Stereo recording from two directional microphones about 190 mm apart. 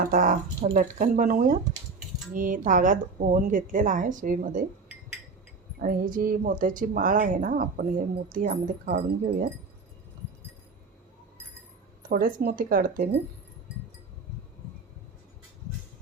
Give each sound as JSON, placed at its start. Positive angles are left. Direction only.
{"t": 0.0, "sound": "a woman's voice", "side_deg": -45}
{"t": 5.8, "sound": "a woman's voice", "side_deg": -45}
{"t": 12.0, "sound": "a woman's voice", "side_deg": -50}